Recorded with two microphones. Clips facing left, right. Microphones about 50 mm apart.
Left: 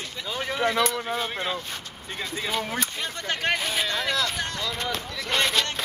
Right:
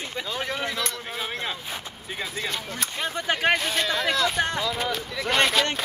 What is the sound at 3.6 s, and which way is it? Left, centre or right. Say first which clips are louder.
Speech: right 2 dB; centre.